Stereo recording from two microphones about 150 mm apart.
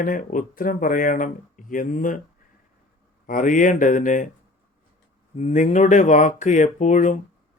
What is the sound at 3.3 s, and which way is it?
Speech, 60° left (ahead or behind).